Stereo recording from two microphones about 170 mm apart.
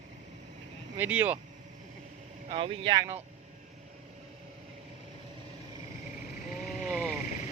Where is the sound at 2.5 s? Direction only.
35° right (ahead or behind).